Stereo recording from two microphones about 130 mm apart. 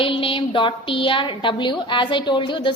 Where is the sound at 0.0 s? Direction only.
40° left (ahead or behind).